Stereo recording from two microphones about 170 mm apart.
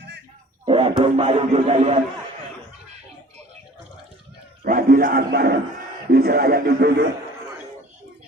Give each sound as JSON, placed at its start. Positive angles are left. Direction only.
{"t": 0.6, "sound": "a man's voice", "side_deg": -35}
{"t": 4.6, "sound": "a man's voice", "side_deg": -60}